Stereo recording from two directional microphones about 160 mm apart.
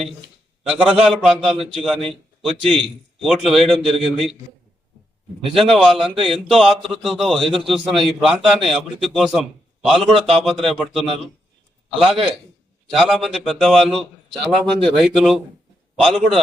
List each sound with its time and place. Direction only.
0.7 s a man's voice: 5° right (ahead or behind)
5.5 s a man's voice: centre (ahead or behind)